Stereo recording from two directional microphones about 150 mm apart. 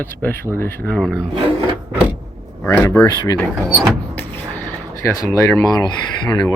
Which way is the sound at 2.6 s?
10° left (ahead or behind).